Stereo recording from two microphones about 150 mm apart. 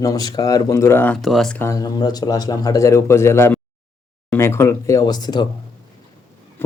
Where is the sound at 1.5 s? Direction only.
20° left (ahead or behind).